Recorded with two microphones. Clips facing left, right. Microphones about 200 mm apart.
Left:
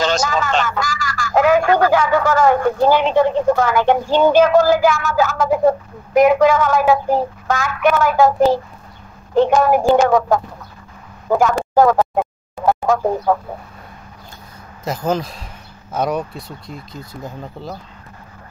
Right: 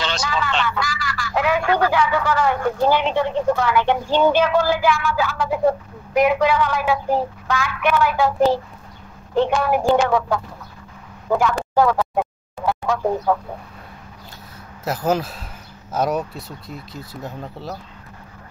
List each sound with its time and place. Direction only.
0.0 s a man's voice: 45° left (ahead or behind)
11.2 s a sound: 45° left (ahead or behind)
14.9 s speech: 5° right (ahead or behind)